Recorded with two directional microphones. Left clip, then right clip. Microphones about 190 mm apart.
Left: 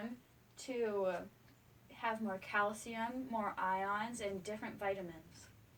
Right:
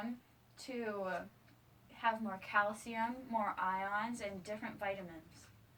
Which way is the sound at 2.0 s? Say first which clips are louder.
Right 3 dB; 30° left (ahead or behind).